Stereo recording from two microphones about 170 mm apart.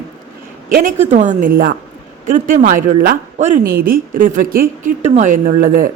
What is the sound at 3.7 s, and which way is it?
Speech, 60° right (ahead or behind).